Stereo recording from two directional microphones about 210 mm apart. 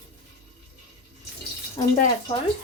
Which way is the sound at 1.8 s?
25° left (ahead or behind).